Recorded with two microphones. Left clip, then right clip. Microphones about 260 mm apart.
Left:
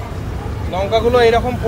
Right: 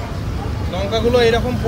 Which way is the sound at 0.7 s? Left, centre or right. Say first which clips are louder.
Left 3 dB; left.